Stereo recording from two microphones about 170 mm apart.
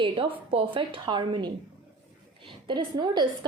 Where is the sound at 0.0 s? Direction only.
30° right (ahead or behind).